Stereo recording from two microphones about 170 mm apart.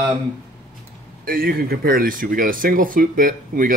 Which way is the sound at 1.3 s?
60° right (ahead or behind).